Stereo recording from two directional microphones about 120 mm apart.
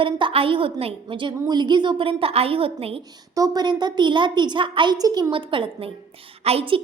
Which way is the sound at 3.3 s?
30° right (ahead or behind).